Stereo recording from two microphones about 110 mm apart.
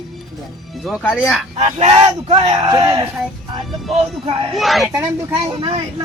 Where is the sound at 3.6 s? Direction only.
Centre (ahead or behind).